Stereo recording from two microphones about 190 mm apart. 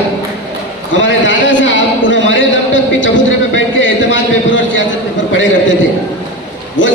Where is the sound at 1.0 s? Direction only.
75° left (ahead or behind).